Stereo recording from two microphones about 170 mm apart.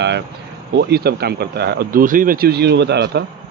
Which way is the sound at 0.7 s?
70° right (ahead or behind).